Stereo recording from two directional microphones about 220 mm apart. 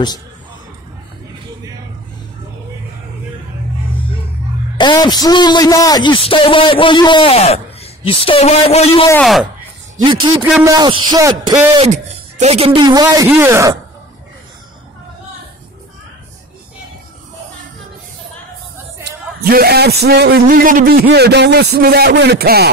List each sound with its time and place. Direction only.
4.7 s a man's voice: 20° left (ahead or behind)
9.0 s a man's voice: 5° left (ahead or behind)
10.4 s speech: 10° right (ahead or behind)
11.9 s speech: 30° right (ahead or behind); by 13.7 s 10° right (ahead or behind)
19.0 s a man's voice: 45° right (ahead or behind)